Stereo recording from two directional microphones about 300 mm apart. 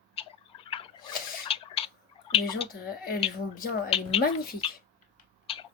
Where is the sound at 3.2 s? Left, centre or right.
Centre.